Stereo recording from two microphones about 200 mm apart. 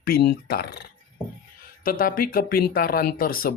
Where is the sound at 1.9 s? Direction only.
45° left (ahead or behind).